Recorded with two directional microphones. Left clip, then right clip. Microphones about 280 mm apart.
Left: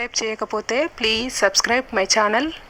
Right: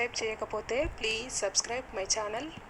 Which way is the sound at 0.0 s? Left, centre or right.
Left.